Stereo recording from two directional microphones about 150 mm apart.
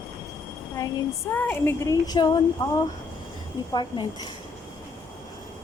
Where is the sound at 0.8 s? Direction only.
20° left (ahead or behind).